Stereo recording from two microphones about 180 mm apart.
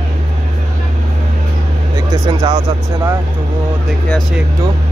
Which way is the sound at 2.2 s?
20° right (ahead or behind).